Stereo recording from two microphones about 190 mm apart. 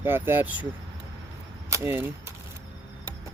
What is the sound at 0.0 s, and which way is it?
Speech, 10° right (ahead or behind).